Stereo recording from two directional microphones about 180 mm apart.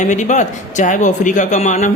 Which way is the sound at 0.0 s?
40° left (ahead or behind).